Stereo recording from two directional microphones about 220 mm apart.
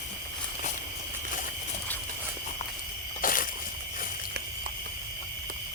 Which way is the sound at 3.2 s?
40° left (ahead or behind).